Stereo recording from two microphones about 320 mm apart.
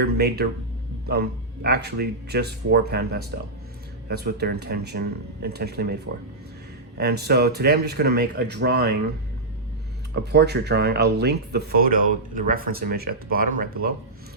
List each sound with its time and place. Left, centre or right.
0.0 s speech: right
10.2 s speech: right